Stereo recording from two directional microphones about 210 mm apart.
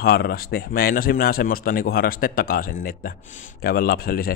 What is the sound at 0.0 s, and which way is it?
A man's voice, 45° left (ahead or behind).